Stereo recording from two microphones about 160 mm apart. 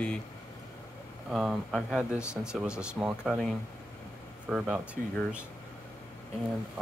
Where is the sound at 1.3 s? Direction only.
Centre (ahead or behind).